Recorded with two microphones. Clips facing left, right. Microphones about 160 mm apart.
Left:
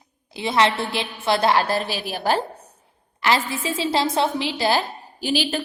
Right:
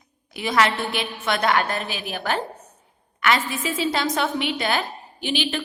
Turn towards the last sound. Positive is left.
turn(degrees=40)  # may be behind; listen again after turning